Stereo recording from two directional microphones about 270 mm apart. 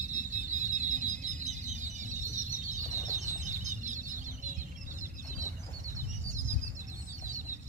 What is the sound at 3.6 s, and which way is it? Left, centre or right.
Chicken, right.